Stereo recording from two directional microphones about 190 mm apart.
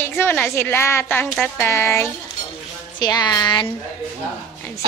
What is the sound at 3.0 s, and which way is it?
Music, 20° left (ahead or behind).